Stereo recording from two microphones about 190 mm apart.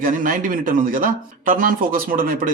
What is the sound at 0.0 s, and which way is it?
Speech, 45° right (ahead or behind).